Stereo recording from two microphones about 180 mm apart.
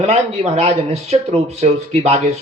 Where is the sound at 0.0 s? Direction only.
35° right (ahead or behind).